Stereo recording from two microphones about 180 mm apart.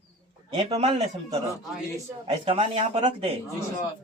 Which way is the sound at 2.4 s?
35° right (ahead or behind).